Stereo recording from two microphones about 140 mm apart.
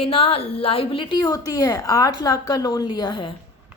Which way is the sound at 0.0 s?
45° left (ahead or behind).